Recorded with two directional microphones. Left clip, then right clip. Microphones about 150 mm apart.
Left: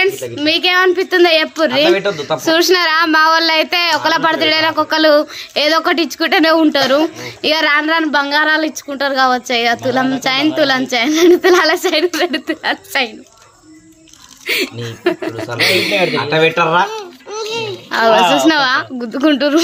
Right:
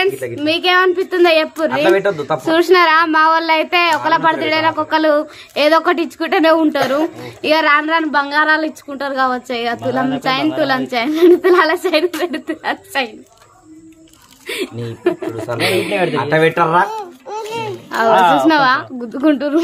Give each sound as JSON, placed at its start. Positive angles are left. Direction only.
{"t": 0.4, "sound": "a woman's voice", "side_deg": 10}
{"t": 14.5, "sound": "a woman's voice", "side_deg": 20}
{"t": 16.2, "sound": "a child's voice", "side_deg": -30}
{"t": 17.9, "sound": "speech", "side_deg": 5}